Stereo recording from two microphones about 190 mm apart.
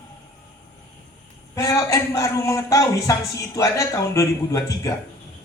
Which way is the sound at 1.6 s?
15° left (ahead or behind).